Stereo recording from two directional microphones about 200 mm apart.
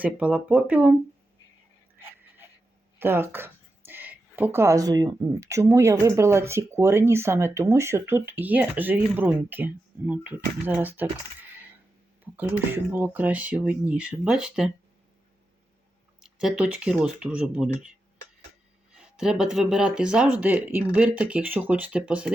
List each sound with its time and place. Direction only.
0.0 s speech: 5° right (ahead or behind)
3.0 s speech: 10° right (ahead or behind)
12.2 s speech: 10° right (ahead or behind)
16.2 s speech: 5° right (ahead or behind)
18.9 s speech: 5° right (ahead or behind)